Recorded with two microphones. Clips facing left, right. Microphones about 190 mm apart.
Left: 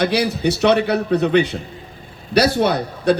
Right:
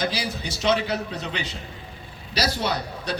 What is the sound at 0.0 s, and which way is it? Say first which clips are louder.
A man's voice: left 10 dB; 65° left (ahead or behind).